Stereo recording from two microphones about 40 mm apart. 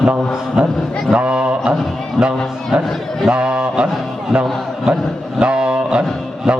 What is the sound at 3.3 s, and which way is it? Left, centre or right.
A man's voice, right.